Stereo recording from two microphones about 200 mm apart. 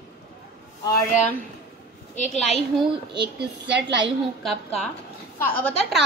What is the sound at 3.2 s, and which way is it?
Speech, 60° right (ahead or behind).